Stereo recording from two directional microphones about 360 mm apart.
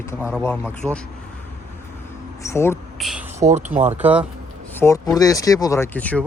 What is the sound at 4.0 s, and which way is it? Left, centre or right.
Speech, centre.